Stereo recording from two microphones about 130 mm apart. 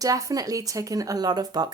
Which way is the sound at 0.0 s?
25° right (ahead or behind).